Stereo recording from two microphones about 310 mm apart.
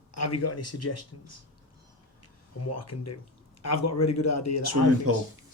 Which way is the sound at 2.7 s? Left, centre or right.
Left.